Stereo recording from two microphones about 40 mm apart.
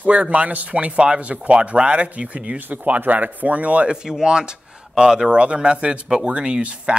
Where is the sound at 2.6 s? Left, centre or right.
Right.